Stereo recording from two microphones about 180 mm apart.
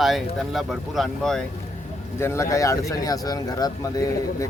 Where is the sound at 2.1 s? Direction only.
15° left (ahead or behind).